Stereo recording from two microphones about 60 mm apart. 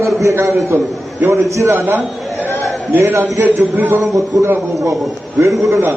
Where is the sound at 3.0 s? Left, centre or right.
Right.